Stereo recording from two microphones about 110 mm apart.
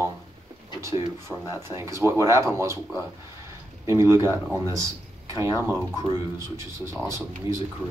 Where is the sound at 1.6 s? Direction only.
25° right (ahead or behind).